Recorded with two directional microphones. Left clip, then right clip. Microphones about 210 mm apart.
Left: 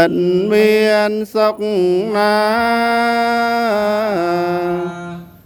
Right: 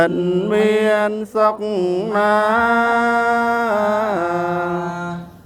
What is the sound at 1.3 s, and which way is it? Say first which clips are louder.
Mantra: even; 45° left (ahead or behind).